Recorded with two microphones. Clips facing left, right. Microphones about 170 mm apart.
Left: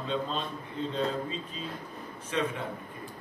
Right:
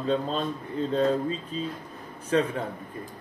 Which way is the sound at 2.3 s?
40° right (ahead or behind).